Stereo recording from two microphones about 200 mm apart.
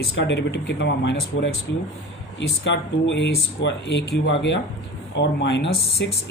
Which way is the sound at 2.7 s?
60° left (ahead or behind).